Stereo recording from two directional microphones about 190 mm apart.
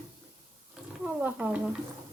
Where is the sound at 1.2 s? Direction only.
10° right (ahead or behind).